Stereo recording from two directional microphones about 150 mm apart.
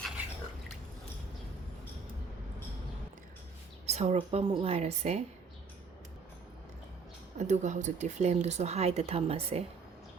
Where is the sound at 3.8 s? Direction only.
45° right (ahead or behind).